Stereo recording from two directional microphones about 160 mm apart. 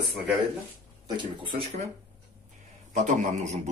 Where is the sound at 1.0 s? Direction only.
30° right (ahead or behind).